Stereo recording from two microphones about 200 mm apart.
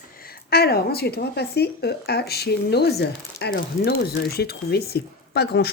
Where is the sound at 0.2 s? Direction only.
50° left (ahead or behind).